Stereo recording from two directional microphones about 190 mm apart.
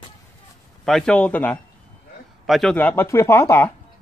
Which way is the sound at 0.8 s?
5° left (ahead or behind).